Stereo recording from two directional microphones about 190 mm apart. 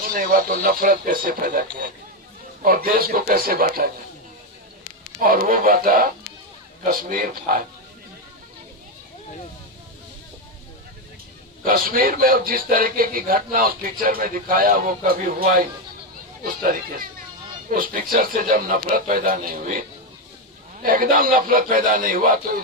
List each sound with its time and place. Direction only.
0.0 s a man's voice: 50° right (ahead or behind)
2.6 s a man's voice: 50° right (ahead or behind)
5.2 s a man's voice: 50° right (ahead or behind)
11.6 s a man's voice: 50° right (ahead or behind)
20.8 s a man's voice: 45° right (ahead or behind)